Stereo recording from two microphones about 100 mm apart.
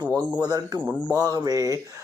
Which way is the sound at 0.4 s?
40° right (ahead or behind).